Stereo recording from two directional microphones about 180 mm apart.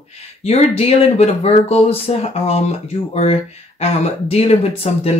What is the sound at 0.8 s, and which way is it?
Speech, 35° left (ahead or behind).